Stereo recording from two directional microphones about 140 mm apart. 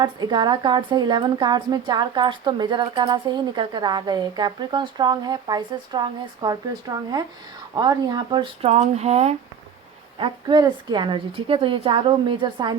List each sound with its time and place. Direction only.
0.0 s a woman's voice: 30° right (ahead or behind)
8.6 s speech: 50° right (ahead or behind)
10.2 s a woman's voice: 35° right (ahead or behind)